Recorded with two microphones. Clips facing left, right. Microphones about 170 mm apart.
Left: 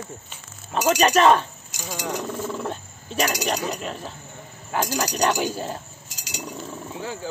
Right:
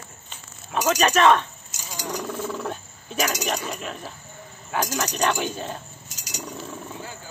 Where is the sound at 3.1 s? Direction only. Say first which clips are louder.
Left 2 dB; 30° left (ahead or behind).